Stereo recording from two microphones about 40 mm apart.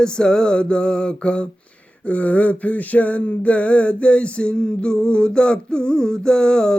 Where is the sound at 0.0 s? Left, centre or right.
Centre.